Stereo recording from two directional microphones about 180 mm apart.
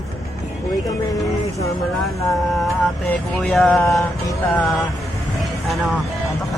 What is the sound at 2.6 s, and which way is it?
Vehicle, 5° left (ahead or behind).